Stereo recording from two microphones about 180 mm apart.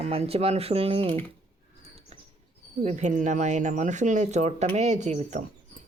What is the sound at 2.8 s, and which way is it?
Speech, 40° right (ahead or behind).